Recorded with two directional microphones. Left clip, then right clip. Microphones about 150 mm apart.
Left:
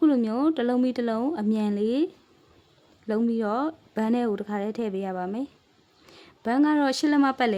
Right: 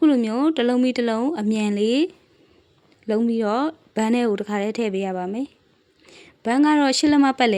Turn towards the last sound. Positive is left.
turn(degrees=-25)  # may be behind; listen again after turning